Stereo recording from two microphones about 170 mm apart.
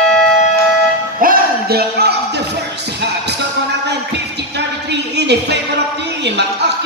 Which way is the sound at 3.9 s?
85° right.